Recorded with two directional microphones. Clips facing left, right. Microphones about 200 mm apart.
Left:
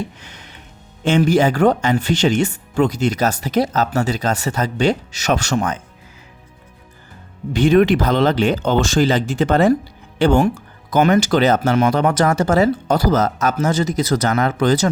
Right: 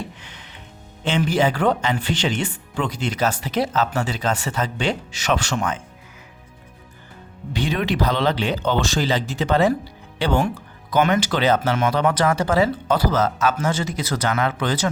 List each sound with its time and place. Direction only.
0.2 s music: 40° left (ahead or behind)
1.0 s speech: 45° left (ahead or behind)
7.5 s speech: 50° left (ahead or behind)